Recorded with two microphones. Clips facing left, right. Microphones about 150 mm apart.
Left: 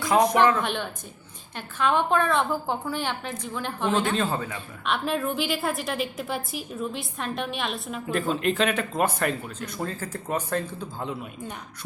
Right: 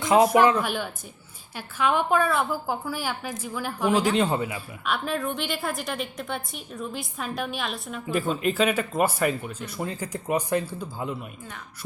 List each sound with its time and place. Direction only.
0.0 s speech: 20° right (ahead or behind)
0.6 s a woman's voice: 5° right (ahead or behind)